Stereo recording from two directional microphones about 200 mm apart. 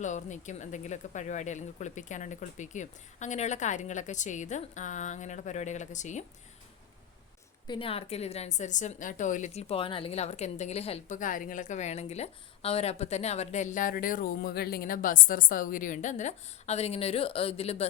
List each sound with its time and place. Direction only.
0.0 s a woman's voice: 35° left (ahead or behind)
7.7 s a woman's voice: 25° left (ahead or behind)